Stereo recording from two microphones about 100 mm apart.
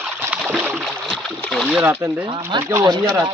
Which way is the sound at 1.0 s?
Centre (ahead or behind).